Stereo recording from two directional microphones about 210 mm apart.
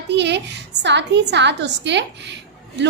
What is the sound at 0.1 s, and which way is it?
A woman's voice, 55° right (ahead or behind).